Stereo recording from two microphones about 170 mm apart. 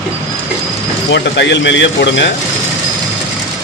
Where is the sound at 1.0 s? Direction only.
90° left.